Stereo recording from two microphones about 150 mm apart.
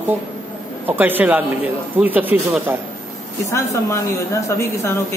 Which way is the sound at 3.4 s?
20° left (ahead or behind).